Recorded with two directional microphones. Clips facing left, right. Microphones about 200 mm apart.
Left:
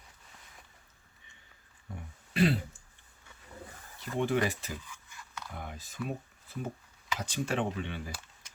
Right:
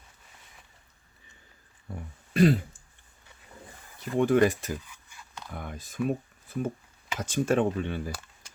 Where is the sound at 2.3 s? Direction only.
45° right (ahead or behind).